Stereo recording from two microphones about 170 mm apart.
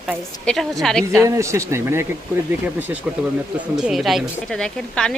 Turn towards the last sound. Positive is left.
turn(degrees=5)  # may be behind; listen again after turning